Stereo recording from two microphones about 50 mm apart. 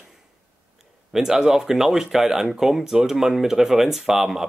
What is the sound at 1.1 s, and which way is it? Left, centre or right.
Speech, centre.